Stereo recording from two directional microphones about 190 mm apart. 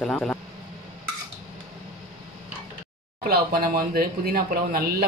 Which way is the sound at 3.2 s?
50° right (ahead or behind).